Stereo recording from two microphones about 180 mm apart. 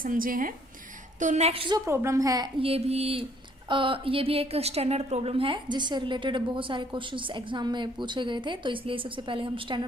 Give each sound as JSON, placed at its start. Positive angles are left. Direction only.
{"t": 0.0, "sound": "a woman's voice", "side_deg": -50}
{"t": 1.8, "sound": "a woman's voice", "side_deg": -15}